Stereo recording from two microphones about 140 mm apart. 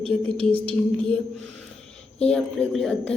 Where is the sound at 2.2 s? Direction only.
5° left (ahead or behind).